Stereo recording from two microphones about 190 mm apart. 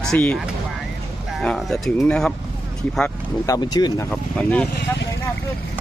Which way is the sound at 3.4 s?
20° left (ahead or behind).